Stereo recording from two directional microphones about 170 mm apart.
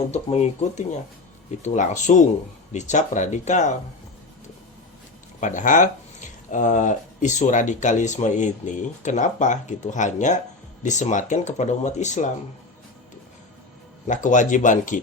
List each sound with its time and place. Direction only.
0.1 s speech: 40° left (ahead or behind)
5.4 s speech: 50° left (ahead or behind)
14.1 s speech: 45° left (ahead or behind)